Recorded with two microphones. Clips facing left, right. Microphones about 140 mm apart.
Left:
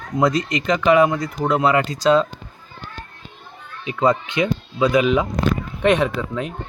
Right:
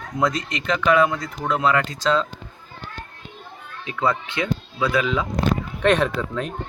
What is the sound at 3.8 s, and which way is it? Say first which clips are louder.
Speech: left 5 dB; 20° left (ahead or behind).